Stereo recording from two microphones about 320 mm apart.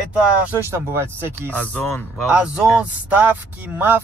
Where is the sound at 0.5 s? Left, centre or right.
Centre.